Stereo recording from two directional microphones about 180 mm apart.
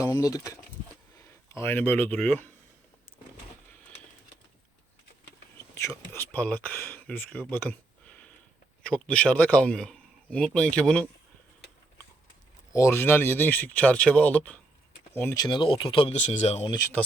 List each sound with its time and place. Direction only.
0.1 s speech: 20° left (ahead or behind)
5.7 s whispering: 15° left (ahead or behind)
6.1 s speech: 10° left (ahead or behind)
12.7 s speech: 15° left (ahead or behind)
15.4 s speech: 25° left (ahead or behind)